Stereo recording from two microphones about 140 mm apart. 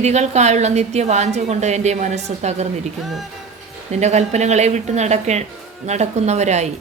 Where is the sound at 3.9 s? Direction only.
55° right (ahead or behind).